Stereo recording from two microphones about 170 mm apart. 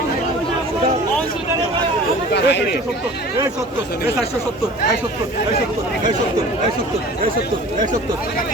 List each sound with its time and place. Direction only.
2.3 s speech: 90° left